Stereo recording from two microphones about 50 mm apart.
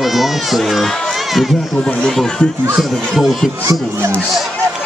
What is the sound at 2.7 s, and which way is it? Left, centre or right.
Speech, centre.